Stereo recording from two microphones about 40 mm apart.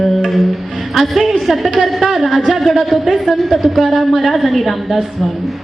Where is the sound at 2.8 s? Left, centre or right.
Centre.